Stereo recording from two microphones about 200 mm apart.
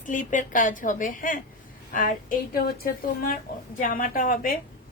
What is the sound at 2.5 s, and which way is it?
Speech, 50° left (ahead or behind).